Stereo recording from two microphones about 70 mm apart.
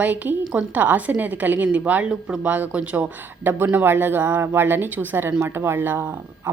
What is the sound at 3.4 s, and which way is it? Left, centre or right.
A woman's voice, right.